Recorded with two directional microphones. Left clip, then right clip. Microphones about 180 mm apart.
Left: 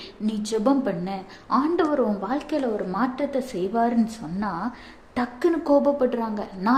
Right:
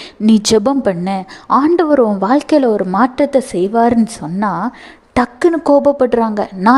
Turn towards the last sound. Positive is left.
turn(degrees=-50)  # may be behind; listen again after turning